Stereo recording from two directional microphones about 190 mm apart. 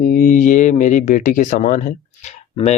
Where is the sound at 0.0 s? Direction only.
50° left (ahead or behind).